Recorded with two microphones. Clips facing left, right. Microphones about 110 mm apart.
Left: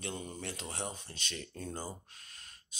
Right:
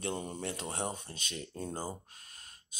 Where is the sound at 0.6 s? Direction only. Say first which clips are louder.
Right 4 dB; 30° right (ahead or behind).